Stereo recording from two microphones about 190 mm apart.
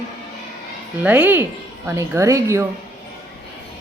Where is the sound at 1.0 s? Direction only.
10° right (ahead or behind).